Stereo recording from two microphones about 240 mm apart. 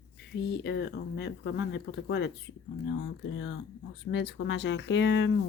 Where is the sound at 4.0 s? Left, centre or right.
Left.